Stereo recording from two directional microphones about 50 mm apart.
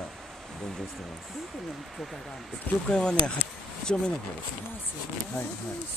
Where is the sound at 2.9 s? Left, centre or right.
Centre.